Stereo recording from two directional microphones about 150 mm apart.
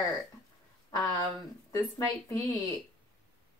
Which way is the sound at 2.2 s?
25° left (ahead or behind).